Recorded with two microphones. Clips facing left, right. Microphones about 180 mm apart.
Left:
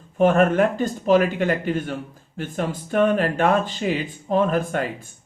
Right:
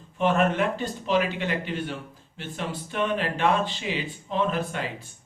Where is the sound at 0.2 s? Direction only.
45° left (ahead or behind).